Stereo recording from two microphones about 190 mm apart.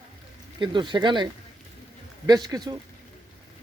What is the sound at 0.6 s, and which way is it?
Speech, 25° right (ahead or behind).